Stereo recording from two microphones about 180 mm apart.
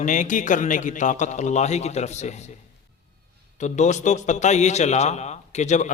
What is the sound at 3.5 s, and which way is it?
A man's voice, 40° left (ahead or behind).